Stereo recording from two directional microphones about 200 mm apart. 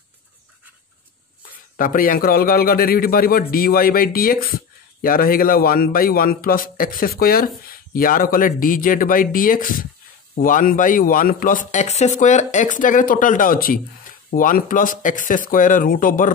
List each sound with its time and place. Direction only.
1.8 s a man's voice: 45° left (ahead or behind)